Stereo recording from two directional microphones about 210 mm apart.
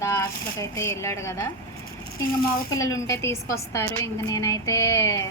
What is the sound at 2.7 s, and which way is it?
Speech, 15° left (ahead or behind).